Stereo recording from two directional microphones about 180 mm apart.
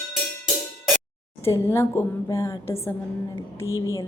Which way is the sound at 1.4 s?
15° left (ahead or behind).